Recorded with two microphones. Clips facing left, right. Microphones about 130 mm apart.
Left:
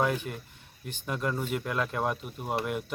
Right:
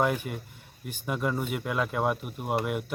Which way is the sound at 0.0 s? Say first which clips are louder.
Right 1 dB; 5° right (ahead or behind).